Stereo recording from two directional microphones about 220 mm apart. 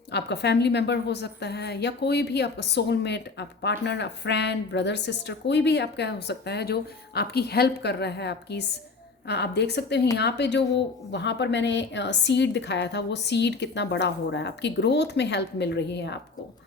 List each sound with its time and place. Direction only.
0.1 s a woman's voice: 50° left (ahead or behind)